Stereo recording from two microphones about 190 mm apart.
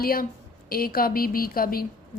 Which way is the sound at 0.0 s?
50° left (ahead or behind).